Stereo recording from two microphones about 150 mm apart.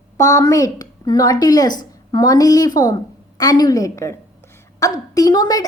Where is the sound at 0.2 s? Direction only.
20° left (ahead or behind).